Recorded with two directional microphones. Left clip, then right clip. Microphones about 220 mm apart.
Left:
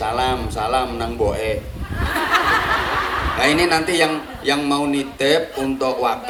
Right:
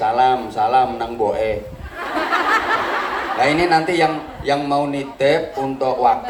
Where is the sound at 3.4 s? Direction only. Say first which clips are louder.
Right 2 dB; 45° left (ahead or behind).